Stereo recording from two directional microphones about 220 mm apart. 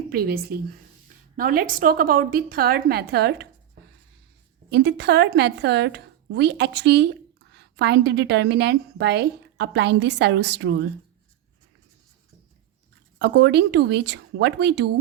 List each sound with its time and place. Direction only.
0.1 s a woman's voice: 45° right (ahead or behind)
4.7 s a woman's voice: 50° right (ahead or behind)
13.1 s a woman's voice: 50° right (ahead or behind)